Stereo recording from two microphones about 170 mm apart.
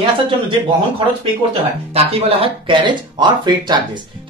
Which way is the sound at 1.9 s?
30° right (ahead or behind).